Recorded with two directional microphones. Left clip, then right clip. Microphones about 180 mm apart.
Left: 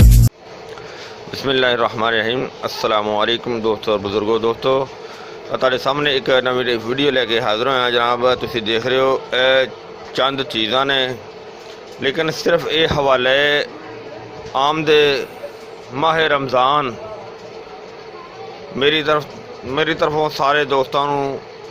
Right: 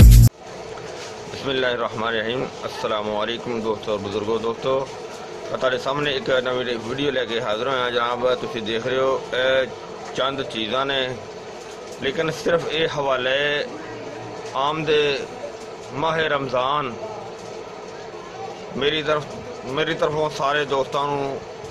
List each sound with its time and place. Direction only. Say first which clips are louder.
0.0 s music: even; centre (ahead or behind)
1.5 s a man's voice: left 7 dB; 45° left (ahead or behind)
18.8 s a man's voice: left 6 dB; 45° left (ahead or behind)